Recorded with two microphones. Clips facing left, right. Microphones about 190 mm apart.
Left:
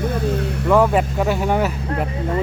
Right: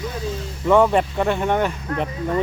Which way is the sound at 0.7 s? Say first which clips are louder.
Even; 5° left (ahead or behind).